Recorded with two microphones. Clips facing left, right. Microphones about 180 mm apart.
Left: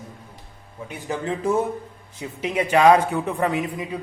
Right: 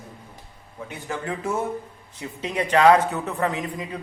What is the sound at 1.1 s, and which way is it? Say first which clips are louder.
Speech: left 5 dB; 20° left (ahead or behind).